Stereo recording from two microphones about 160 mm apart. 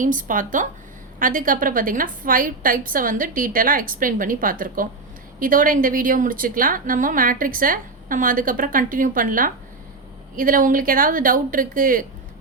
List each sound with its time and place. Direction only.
0.0 s a woman's voice: 55° right (ahead or behind)